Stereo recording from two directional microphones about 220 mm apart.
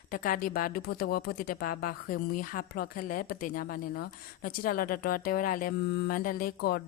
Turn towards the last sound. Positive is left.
turn(degrees=40)  # may be behind; listen again after turning